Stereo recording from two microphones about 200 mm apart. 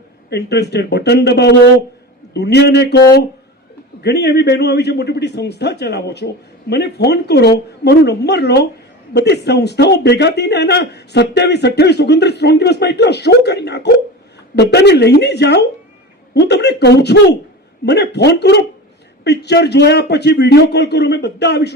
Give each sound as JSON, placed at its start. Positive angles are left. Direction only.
{"t": 0.3, "sound": "speech", "side_deg": 55}
{"t": 4.0, "sound": "speech", "side_deg": 55}